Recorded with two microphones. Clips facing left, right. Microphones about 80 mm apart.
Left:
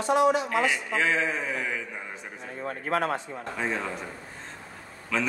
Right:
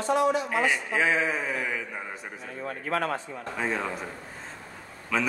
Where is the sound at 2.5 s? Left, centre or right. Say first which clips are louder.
Left 2 dB; left.